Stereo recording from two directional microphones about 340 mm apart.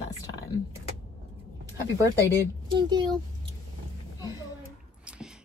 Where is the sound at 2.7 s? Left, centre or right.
Centre.